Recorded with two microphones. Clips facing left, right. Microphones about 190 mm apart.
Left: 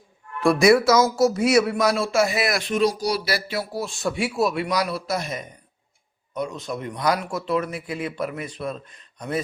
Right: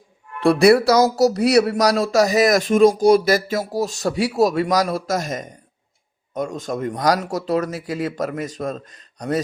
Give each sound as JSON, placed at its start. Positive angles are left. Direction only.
{"t": 0.3, "sound": "speech", "side_deg": -30}